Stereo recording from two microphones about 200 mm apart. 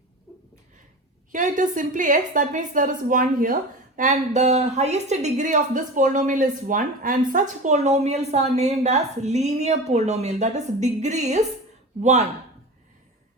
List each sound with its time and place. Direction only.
1.3 s a woman's voice: 40° right (ahead or behind)